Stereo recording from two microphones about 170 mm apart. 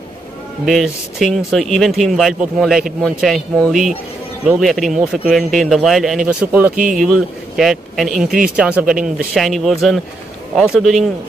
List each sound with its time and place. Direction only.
0.7 s speech: centre (ahead or behind)
4.5 s speech: centre (ahead or behind)
6.7 s speech: 50° right (ahead or behind)
7.5 s speech: centre (ahead or behind)